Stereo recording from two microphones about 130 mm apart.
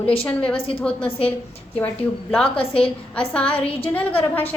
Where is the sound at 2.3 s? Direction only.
5° left (ahead or behind).